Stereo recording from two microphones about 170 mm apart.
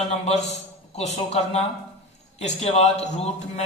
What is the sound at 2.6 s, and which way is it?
Speech, 40° left (ahead or behind).